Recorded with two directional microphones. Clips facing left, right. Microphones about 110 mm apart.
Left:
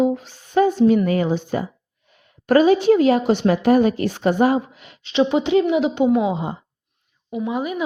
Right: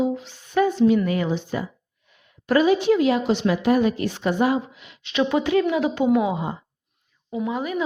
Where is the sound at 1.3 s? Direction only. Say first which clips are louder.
Left 4 dB; 45° left (ahead or behind).